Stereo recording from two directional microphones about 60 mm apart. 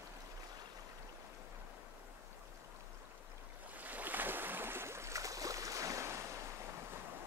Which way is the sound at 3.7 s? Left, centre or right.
Right.